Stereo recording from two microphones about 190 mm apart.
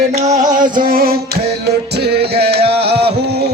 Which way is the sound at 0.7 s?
50° right (ahead or behind).